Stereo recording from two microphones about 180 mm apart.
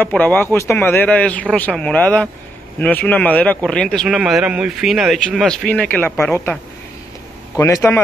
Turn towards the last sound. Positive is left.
turn(degrees=15)  # may be behind; listen again after turning